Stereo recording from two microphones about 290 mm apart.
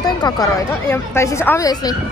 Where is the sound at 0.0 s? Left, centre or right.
Centre.